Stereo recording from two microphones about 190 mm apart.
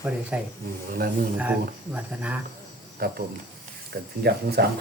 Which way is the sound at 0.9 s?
50° right (ahead or behind).